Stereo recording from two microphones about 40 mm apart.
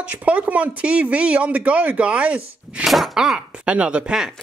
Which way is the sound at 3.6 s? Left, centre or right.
Right.